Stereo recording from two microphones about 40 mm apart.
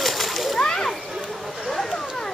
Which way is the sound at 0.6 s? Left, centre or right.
Centre.